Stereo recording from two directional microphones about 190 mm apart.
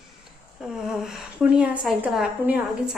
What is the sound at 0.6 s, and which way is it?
A woman's voice, centre (ahead or behind).